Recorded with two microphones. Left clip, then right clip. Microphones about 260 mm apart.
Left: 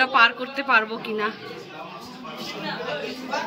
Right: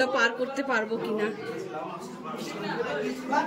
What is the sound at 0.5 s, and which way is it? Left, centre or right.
Speech, left.